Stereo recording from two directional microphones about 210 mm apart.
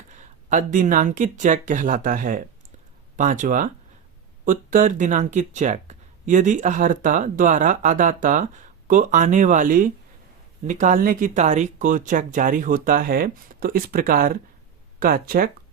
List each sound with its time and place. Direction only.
0.1 s speech: 35° right (ahead or behind)